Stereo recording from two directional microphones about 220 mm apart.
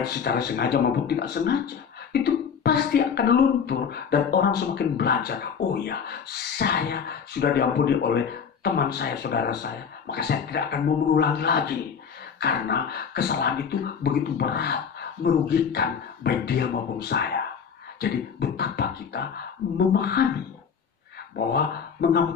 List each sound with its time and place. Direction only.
0.1 s speech: 45° left (ahead or behind)
21.5 s speech: 45° left (ahead or behind)